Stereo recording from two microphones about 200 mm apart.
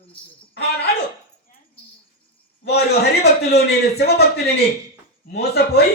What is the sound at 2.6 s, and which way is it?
A man's voice, 55° left (ahead or behind).